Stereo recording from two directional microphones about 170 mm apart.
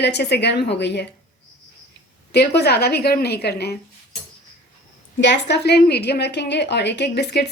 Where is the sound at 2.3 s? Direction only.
75° left (ahead or behind).